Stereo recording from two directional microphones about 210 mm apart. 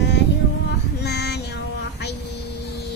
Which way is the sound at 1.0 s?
50° left (ahead or behind).